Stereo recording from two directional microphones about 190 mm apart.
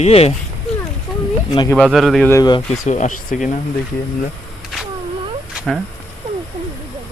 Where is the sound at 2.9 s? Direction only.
40° left (ahead or behind).